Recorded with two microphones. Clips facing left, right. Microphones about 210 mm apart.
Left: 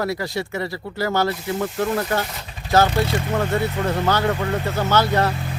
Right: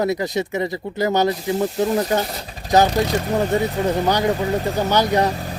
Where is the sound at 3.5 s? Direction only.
15° right (ahead or behind).